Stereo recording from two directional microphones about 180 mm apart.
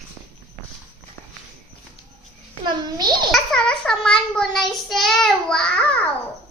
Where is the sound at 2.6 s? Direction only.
25° right (ahead or behind).